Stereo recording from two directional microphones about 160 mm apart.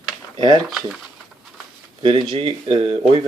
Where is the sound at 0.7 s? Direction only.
Centre (ahead or behind).